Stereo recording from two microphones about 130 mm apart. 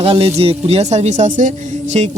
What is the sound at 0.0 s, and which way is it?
Speech, 45° right (ahead or behind).